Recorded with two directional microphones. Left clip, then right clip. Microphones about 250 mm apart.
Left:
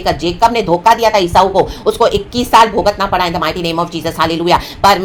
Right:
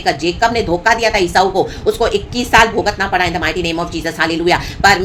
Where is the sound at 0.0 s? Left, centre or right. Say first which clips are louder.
Left 2 dB; centre.